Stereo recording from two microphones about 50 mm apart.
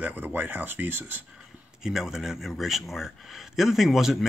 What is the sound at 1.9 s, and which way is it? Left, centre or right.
Speech, centre.